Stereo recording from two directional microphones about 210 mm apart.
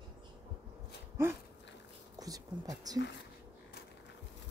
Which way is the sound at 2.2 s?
15° right (ahead or behind).